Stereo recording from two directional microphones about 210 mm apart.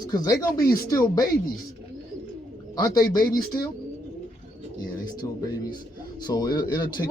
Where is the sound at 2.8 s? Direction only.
15° left (ahead or behind).